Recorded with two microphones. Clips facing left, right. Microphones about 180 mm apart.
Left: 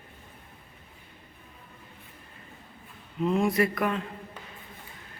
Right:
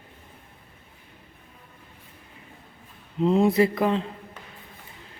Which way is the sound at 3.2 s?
25° right (ahead or behind).